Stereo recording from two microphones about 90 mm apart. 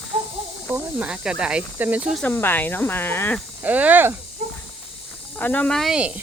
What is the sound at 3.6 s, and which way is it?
Speech, 15° right (ahead or behind).